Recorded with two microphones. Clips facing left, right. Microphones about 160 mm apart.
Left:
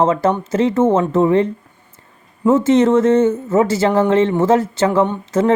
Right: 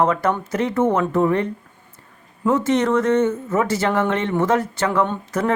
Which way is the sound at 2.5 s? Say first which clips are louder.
Left 6 dB; 25° left (ahead or behind).